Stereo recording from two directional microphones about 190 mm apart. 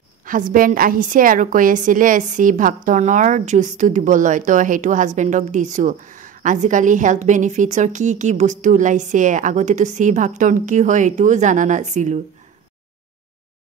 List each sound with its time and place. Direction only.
0.2 s a woman's voice: 45° right (ahead or behind)